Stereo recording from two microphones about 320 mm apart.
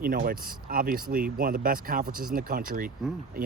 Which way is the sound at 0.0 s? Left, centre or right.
Right.